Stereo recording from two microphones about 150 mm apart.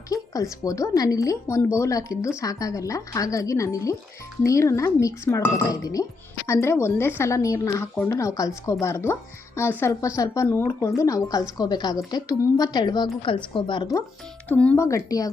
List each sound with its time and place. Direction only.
0.6 s speech: 20° left (ahead or behind)
14.4 s speech: 10° left (ahead or behind)
14.8 s speech: 20° left (ahead or behind)